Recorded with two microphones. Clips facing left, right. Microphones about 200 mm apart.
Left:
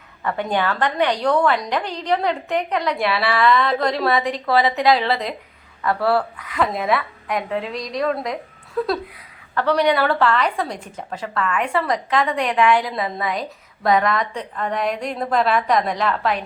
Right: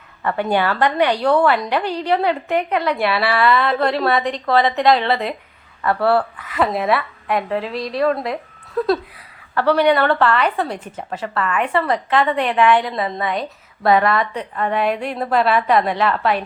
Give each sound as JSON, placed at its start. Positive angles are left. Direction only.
{"t": 0.3, "sound": "a woman's voice", "side_deg": -65}
{"t": 0.9, "sound": "a woman's voice", "side_deg": -10}
{"t": 2.6, "sound": "a woman's voice", "side_deg": -60}
{"t": 3.4, "sound": "a woman's voice", "side_deg": -5}
{"t": 3.7, "sound": "a woman's voice", "side_deg": -60}
{"t": 4.0, "sound": "a woman's voice", "side_deg": 0}